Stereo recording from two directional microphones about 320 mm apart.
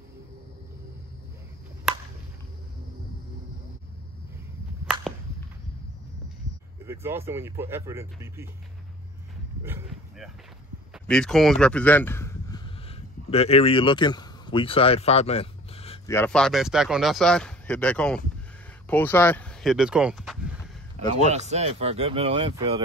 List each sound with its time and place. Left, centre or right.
6.9 s speech: centre
9.7 s dog: centre
11.1 s speech: centre
16.2 s speech: centre
21.2 s speech: right